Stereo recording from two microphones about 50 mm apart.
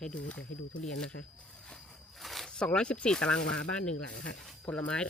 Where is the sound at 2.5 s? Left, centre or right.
Centre.